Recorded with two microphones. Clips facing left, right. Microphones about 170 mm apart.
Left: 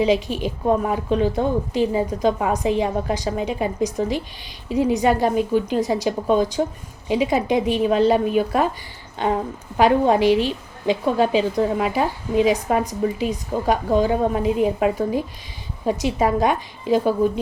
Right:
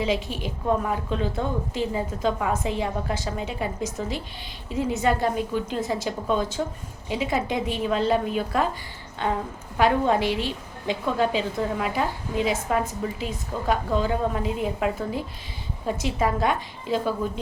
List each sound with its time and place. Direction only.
0.0 s a woman's voice: 15° left (ahead or behind)
9.7 s a woman's voice: 15° left (ahead or behind)